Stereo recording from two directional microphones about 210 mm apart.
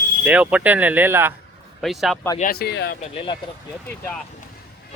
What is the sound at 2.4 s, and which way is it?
Speech, 45° left (ahead or behind).